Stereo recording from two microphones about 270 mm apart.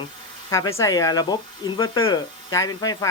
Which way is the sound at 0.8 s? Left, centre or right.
Centre.